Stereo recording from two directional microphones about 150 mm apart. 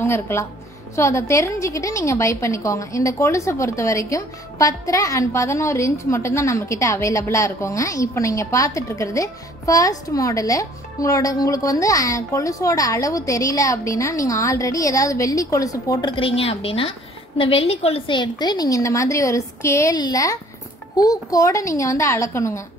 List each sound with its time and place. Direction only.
0.0 s a woman's voice: 15° left (ahead or behind)